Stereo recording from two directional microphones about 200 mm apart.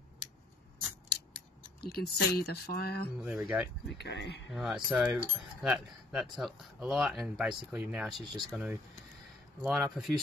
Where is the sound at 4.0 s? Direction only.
55° left (ahead or behind).